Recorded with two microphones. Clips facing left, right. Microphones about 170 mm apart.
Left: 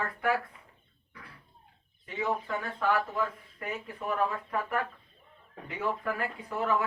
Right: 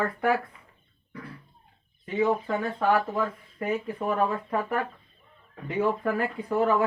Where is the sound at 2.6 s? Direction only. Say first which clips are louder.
Right 4 dB; 30° right (ahead or behind).